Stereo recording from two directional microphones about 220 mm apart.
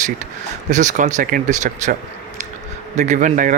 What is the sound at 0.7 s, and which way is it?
Speech, 35° right (ahead or behind).